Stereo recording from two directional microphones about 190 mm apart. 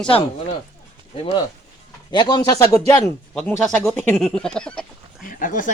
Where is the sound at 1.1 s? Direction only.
25° left (ahead or behind); by 5.2 s 5° left (ahead or behind).